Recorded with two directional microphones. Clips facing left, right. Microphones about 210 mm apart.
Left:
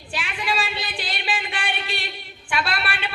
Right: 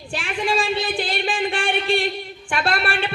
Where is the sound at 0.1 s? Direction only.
50° right (ahead or behind).